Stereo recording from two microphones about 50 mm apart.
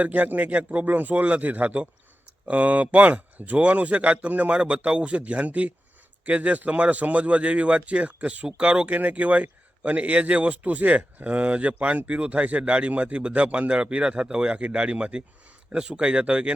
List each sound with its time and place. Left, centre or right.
0.0 s a man's voice: right